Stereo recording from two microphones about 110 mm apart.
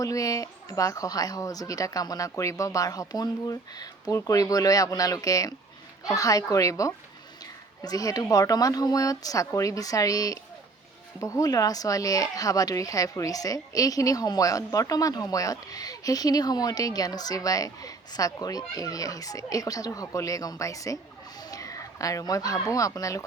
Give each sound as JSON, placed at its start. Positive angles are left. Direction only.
{"t": 0.0, "sound": "speech", "side_deg": 30}